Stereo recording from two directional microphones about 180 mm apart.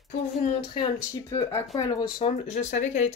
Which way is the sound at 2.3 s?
35° left (ahead or behind).